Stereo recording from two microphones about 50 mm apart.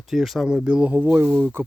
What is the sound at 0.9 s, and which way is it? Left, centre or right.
Speech, right.